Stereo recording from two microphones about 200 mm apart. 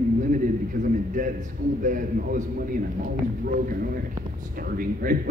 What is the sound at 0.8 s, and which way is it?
Speech, 40° right (ahead or behind).